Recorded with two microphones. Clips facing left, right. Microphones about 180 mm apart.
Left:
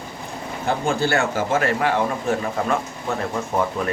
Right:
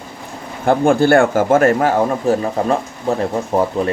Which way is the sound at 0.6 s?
55° right (ahead or behind).